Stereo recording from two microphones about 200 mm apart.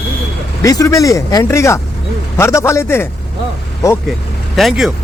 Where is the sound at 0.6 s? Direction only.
15° left (ahead or behind).